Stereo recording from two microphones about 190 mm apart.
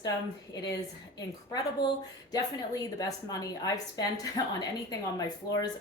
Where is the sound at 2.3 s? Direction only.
20° left (ahead or behind).